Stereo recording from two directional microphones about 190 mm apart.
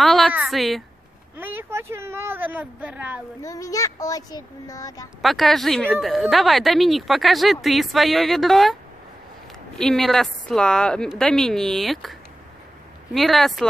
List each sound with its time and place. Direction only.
0.0 s a woman's voice: centre (ahead or behind)
1.4 s speech: 10° right (ahead or behind)
3.4 s a child's voice: 15° left (ahead or behind)
5.2 s a woman's voice: centre (ahead or behind)
9.8 s a woman's voice: centre (ahead or behind)